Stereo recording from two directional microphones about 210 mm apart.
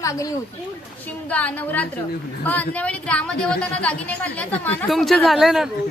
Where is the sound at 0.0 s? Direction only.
15° left (ahead or behind); by 5.7 s centre (ahead or behind).